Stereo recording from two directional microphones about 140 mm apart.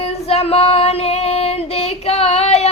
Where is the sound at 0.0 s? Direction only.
45° left (ahead or behind).